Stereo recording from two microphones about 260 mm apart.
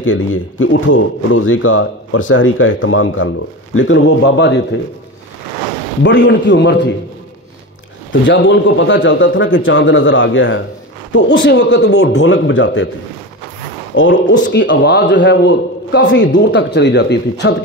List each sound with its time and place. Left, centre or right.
0.0 s a man's voice: left
6.0 s a man's voice: left
8.1 s a man's voice: left
13.9 s a man's voice: left